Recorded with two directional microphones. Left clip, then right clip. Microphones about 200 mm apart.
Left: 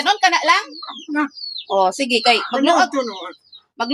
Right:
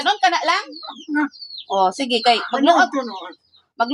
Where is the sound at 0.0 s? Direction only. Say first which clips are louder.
Left 2 dB; 15° right (ahead or behind).